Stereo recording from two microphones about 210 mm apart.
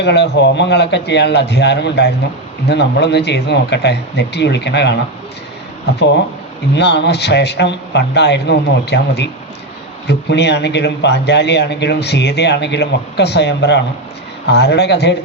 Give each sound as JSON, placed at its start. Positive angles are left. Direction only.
{"t": 0.0, "sound": "a man's voice", "side_deg": 55}
{"t": 6.7, "sound": "a man's voice", "side_deg": 55}